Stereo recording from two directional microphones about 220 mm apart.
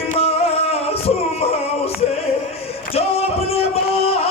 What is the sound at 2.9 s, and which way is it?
Music, 25° left (ahead or behind).